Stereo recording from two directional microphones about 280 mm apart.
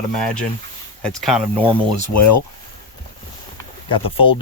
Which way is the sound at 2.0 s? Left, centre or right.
Left.